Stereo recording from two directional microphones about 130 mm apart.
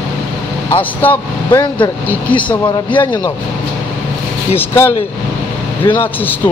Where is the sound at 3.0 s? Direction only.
35° left (ahead or behind).